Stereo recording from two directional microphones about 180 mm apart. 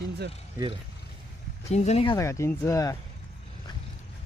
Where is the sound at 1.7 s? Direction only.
40° left (ahead or behind).